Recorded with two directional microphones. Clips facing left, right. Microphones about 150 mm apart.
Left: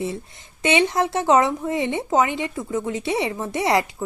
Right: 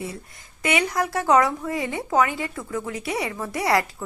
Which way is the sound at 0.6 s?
25° left (ahead or behind).